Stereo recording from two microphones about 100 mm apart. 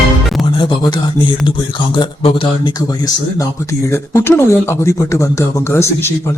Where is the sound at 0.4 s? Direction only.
60° left (ahead or behind).